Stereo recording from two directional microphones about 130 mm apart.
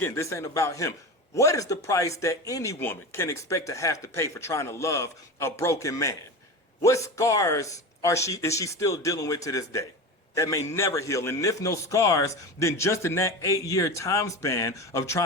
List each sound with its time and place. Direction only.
0.0 s a man's voice: 20° left (ahead or behind)